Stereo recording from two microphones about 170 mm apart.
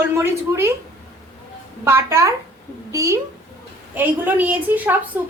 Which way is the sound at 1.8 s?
15° right (ahead or behind).